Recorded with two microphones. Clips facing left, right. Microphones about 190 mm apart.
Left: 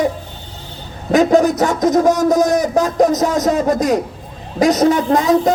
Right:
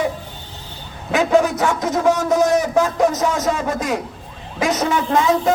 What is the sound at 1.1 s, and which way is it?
A man's voice, 40° left (ahead or behind).